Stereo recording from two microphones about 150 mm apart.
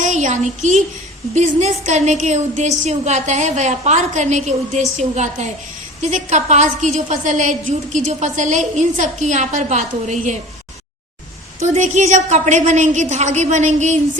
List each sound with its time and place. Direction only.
0.0 s a sound: 55° right (ahead or behind)
1.3 s a woman's voice: 50° right (ahead or behind)
11.6 s a woman's voice: 50° right (ahead or behind)